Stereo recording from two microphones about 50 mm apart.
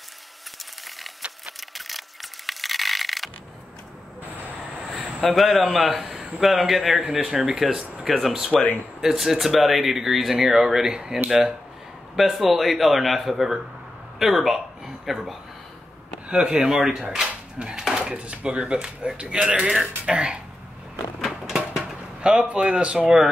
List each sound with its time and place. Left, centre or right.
1.6 s mechanisms: centre
4.7 s a sound: centre
6.4 s speech: centre
16.3 s speech: centre
21.5 s a sound: centre
22.2 s speech: centre